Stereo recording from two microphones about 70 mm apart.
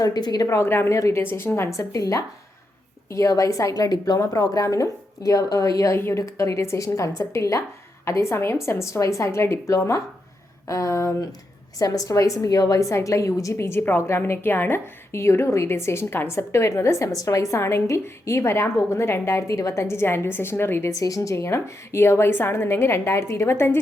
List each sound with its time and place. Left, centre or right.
0.0 s a woman's voice: left
0.4 s a woman's voice: left
1.2 s a woman's voice: left
17.5 s a woman's voice: left
20.9 s a woman's voice: left